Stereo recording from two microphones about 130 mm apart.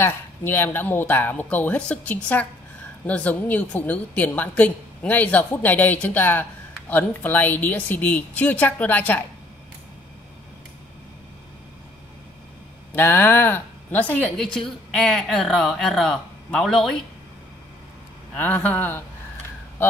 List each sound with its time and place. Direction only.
0.0 s a woman's voice: 15° left (ahead or behind)
12.9 s a woman's voice: 15° left (ahead or behind)
18.3 s a woman's voice: 10° left (ahead or behind)